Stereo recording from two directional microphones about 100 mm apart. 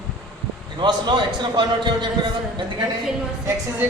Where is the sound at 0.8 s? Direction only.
50° right (ahead or behind).